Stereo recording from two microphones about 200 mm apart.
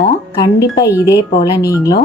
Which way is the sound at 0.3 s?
20° left (ahead or behind).